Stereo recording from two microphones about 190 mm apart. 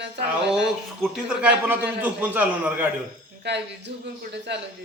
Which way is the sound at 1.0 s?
5° right (ahead or behind).